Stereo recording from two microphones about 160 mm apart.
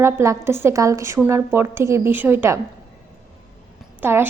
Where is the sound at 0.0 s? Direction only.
15° right (ahead or behind).